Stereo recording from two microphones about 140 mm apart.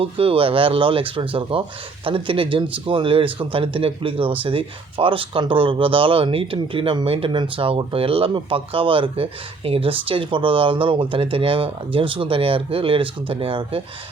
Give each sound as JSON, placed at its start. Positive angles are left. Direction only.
{"t": 0.0, "sound": "speech", "side_deg": -40}